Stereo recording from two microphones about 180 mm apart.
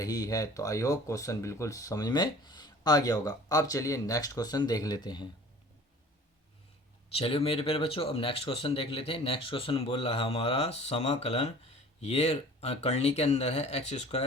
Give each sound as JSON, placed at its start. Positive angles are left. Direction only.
{"t": 0.0, "sound": "speech", "side_deg": 20}
{"t": 7.1, "sound": "speech", "side_deg": 30}